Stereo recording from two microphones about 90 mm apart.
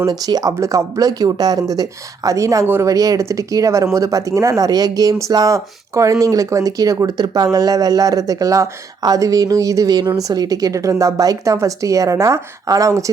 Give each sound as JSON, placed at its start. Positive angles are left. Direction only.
{"t": 0.0, "sound": "speech", "side_deg": -45}